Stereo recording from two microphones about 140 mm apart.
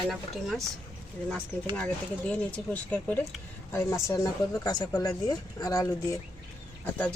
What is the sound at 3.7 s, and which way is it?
Speech, 20° left (ahead or behind).